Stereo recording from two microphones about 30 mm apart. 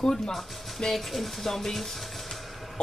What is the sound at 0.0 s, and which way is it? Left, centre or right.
Speech, centre.